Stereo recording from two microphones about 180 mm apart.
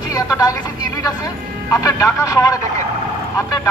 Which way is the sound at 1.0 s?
20° left (ahead or behind).